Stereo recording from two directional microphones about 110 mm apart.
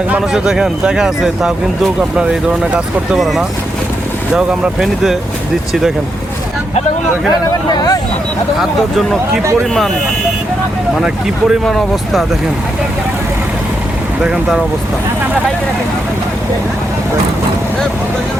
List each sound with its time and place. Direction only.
0.1 s speech: 5° right (ahead or behind)
7.7 s speech: 40° left (ahead or behind)
8.5 s speech: centre (ahead or behind)
11.0 s speech: 5° right (ahead or behind)
14.2 s speech: 10° right (ahead or behind)